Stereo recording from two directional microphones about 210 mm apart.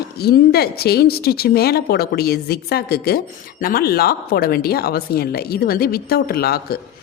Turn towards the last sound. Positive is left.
turn(degrees=45)  # may be behind; listen again after turning